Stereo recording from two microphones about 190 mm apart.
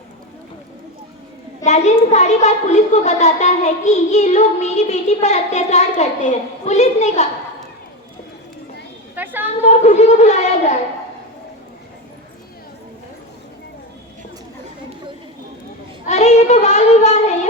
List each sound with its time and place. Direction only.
1.6 s a child's voice: 35° left (ahead or behind)
9.1 s a sound: 10° right (ahead or behind)
9.6 s a child's voice: 35° left (ahead or behind)
16.0 s child singing: 35° left (ahead or behind)